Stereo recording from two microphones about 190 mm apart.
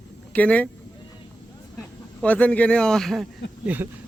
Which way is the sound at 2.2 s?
5° left (ahead or behind).